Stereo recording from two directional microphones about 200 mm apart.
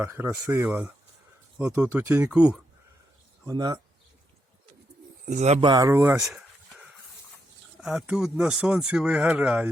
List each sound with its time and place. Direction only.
0.0 s speech: 10° right (ahead or behind)
3.4 s speech: 20° right (ahead or behind)
5.2 s speech: 40° right (ahead or behind); by 9.6 s 5° right (ahead or behind)